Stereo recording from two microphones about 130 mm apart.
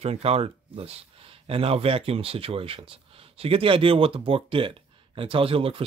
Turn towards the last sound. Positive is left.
turn(degrees=-45)  # may be behind; listen again after turning